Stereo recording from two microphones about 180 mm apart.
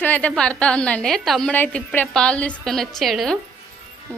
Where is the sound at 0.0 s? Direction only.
10° left (ahead or behind).